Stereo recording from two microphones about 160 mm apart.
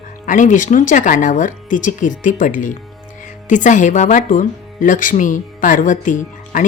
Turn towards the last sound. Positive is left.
turn(degrees=55)  # may be behind; listen again after turning